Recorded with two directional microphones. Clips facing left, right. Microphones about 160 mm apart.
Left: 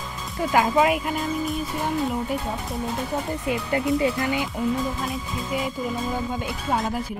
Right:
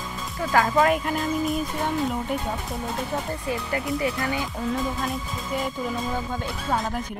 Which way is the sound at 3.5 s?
25° left (ahead or behind).